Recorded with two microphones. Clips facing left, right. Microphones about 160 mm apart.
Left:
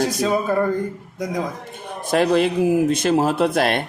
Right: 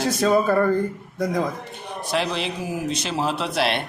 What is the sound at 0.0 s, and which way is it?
Speech, 15° left (ahead or behind).